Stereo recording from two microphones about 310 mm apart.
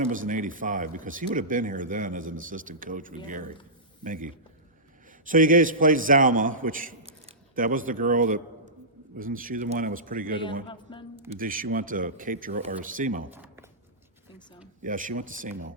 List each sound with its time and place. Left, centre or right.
0.1 s a man's voice: right
10.4 s a man's voice: centre
11.3 s speech: right
13.3 s a sound: centre
14.8 s speech: right